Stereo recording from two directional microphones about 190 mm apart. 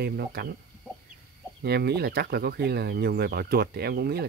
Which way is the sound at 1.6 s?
60° right (ahead or behind).